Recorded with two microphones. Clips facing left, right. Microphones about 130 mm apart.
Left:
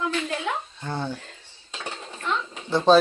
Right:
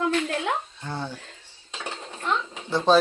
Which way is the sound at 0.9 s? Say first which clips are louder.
Left 3 dB; 15° left (ahead or behind).